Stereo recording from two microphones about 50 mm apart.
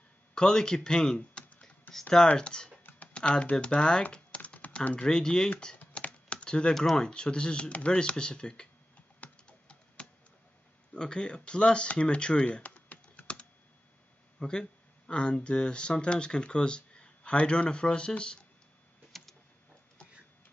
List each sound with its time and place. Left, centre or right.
0.3 s speech: centre
2.8 s computer keyboard: left
3.1 s speech: left
4.0 s typing: left
5.0 s speech: centre
5.8 s typing: left
6.7 s speech: centre
7.0 s speech: centre
9.5 s computer keyboard: left
10.9 s speech: centre
19.1 s a sound: centre